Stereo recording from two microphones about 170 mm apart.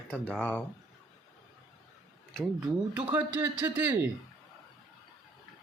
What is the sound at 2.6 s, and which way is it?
Speech, 10° right (ahead or behind).